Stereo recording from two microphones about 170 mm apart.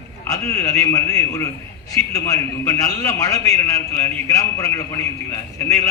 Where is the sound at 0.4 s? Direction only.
15° left (ahead or behind).